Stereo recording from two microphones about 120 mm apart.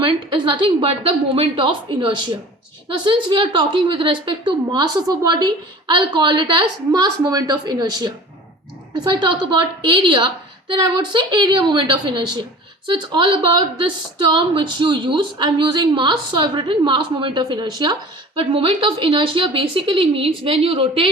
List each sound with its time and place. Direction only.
0.0 s a woman's voice: 40° right (ahead or behind)